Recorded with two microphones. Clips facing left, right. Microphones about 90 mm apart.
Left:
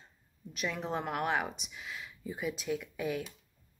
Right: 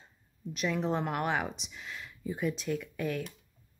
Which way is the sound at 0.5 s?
Centre (ahead or behind).